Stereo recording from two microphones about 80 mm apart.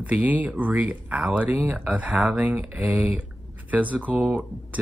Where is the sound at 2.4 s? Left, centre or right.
Centre.